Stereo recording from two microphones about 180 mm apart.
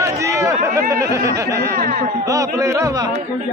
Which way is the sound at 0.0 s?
15° right (ahead or behind).